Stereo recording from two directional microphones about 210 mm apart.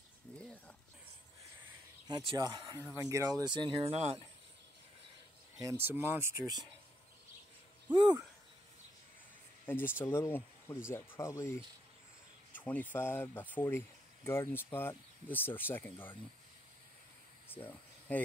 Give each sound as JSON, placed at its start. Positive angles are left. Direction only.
{"t": 0.4, "sound": "a sound", "side_deg": 5}
{"t": 2.0, "sound": "speech", "side_deg": -20}
{"t": 5.6, "sound": "speech", "side_deg": -15}
{"t": 7.9, "sound": "speech", "side_deg": -20}
{"t": 9.7, "sound": "speech", "side_deg": 10}
{"t": 17.6, "sound": "a sound", "side_deg": 5}